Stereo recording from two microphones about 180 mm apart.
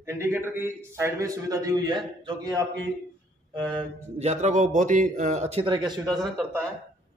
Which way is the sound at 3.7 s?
35° right (ahead or behind).